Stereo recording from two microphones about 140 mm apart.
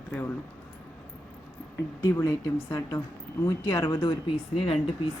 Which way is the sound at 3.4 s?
25° left (ahead or behind).